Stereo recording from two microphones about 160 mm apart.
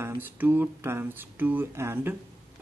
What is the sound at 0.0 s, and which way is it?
Speech, 15° right (ahead or behind).